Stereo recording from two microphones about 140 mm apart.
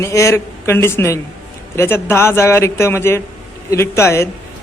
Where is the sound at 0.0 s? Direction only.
20° left (ahead or behind).